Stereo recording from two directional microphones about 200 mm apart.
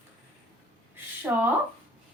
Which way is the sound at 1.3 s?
5° right (ahead or behind).